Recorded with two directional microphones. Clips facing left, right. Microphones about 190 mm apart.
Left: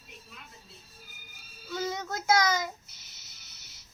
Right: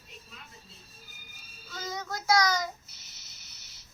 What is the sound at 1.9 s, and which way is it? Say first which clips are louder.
Child singing: right 1 dB; 20° left (ahead or behind).